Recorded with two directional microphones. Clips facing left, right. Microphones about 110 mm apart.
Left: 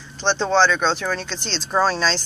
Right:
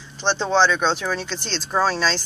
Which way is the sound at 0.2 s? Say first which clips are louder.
Left 1 dB; 10° right (ahead or behind).